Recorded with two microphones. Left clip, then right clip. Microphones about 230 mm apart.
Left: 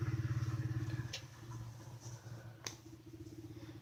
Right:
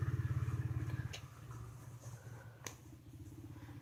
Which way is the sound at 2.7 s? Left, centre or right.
Centre.